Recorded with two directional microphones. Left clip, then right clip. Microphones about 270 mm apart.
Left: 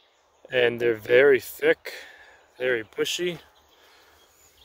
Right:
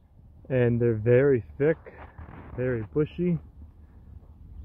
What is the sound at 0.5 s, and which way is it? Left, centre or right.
Speech, centre.